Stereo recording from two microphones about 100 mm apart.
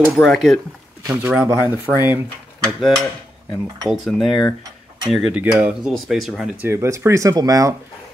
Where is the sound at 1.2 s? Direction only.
10° right (ahead or behind).